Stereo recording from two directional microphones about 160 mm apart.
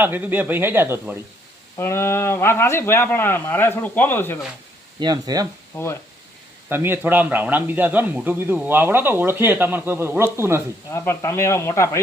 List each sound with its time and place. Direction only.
0.0 s a man's voice: 10° right (ahead or behind)
1.7 s speech: 15° left (ahead or behind)
4.9 s speech: 25° right (ahead or behind)
5.7 s speech: 15° left (ahead or behind)
6.7 s a man's voice: 15° right (ahead or behind)
10.9 s speech: 15° left (ahead or behind)